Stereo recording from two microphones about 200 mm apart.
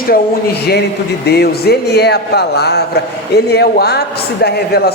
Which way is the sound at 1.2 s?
55° left (ahead or behind).